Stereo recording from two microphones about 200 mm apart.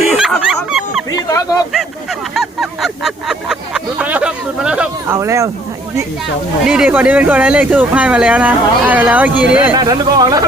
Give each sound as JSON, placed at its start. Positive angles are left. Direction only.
{"t": 0.1, "sound": "dog", "side_deg": 0}
{"t": 1.3, "sound": "bird", "side_deg": 15}
{"t": 2.3, "sound": "a sound", "side_deg": 0}
{"t": 5.1, "sound": "speech", "side_deg": -15}
{"t": 6.7, "sound": "speech", "side_deg": -5}
{"t": 9.7, "sound": "speech", "side_deg": -20}